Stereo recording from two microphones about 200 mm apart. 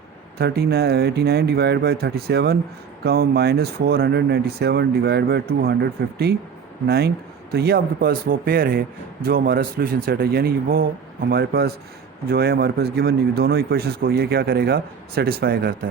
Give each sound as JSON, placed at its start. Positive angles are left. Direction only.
{"t": 0.3, "sound": "speech", "side_deg": -55}